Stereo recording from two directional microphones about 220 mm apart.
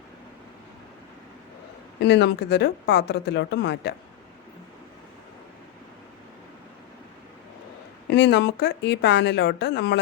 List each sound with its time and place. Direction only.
2.0 s speech: 50° left (ahead or behind)
8.1 s speech: 50° left (ahead or behind)